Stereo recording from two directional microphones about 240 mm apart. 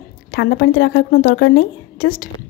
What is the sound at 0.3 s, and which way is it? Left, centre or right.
A woman's voice, left.